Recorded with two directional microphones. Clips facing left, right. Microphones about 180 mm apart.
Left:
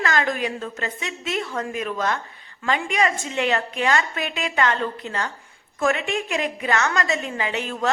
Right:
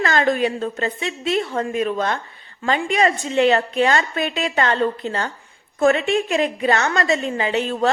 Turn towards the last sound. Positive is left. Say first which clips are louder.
# right 5 dB
turn(degrees=-30)  # may be behind; listen again after turning